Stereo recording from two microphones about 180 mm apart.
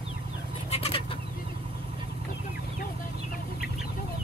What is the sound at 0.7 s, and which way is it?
Chicken, 30° left (ahead or behind).